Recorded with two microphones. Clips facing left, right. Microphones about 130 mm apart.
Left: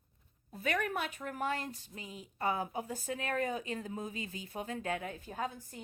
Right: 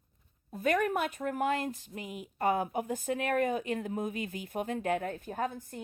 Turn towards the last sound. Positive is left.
turn(degrees=-55)  # may be behind; listen again after turning